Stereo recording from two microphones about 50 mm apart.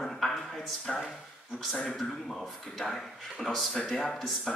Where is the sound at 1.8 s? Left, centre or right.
Centre.